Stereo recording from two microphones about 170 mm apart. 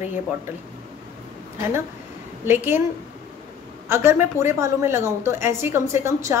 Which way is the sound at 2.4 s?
15° right (ahead or behind).